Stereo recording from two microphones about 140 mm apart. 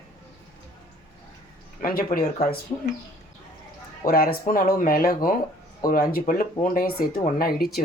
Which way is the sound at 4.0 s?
90° left.